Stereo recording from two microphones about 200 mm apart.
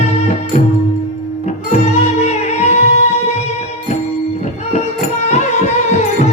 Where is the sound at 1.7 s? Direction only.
35° left (ahead or behind).